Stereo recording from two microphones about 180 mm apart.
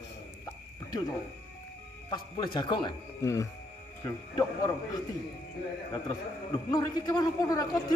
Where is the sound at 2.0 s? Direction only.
25° left (ahead or behind).